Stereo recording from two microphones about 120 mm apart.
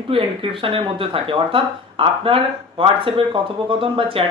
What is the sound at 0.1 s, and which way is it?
Speech, 50° right (ahead or behind).